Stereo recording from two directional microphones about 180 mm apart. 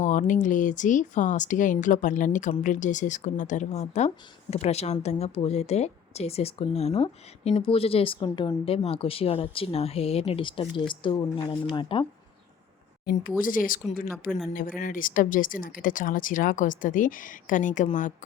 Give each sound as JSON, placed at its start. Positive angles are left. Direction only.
{"t": 0.0, "sound": "a woman's voice", "side_deg": 45}
{"t": 13.4, "sound": "speech", "side_deg": 50}